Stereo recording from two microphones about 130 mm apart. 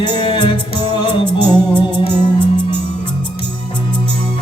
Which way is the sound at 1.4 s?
15° right (ahead or behind).